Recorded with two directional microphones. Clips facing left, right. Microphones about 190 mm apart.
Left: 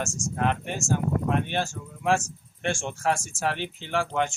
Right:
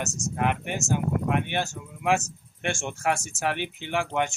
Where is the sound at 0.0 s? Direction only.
15° right (ahead or behind).